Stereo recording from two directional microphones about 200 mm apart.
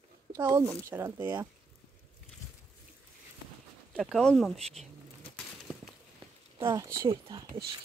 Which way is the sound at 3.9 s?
Centre (ahead or behind).